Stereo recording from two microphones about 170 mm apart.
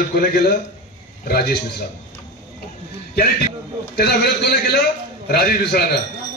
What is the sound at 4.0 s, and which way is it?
A man's voice, 70° left (ahead or behind).